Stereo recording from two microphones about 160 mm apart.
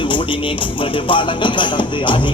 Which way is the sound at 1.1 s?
30° left (ahead or behind).